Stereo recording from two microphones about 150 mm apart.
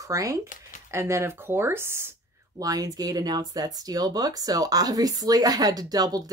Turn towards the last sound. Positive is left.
turn(degrees=-25)  # may be behind; listen again after turning